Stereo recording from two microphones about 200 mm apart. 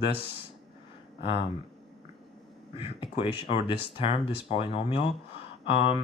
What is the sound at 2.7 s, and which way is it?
Speech, 25° left (ahead or behind).